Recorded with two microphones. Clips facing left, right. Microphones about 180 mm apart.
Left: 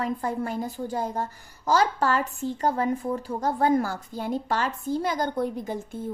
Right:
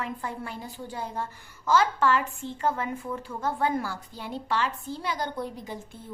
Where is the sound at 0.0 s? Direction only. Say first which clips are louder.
Left 6 dB; 40° left (ahead or behind).